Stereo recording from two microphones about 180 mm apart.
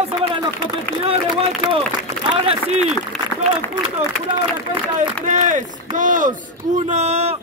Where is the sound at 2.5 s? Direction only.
35° right (ahead or behind).